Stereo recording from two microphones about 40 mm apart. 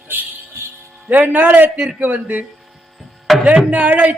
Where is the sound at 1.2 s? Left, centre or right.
Right.